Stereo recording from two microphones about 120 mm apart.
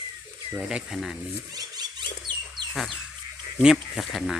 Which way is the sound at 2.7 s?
Centre (ahead or behind).